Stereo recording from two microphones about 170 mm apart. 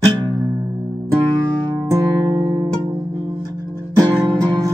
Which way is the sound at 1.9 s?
25° right (ahead or behind).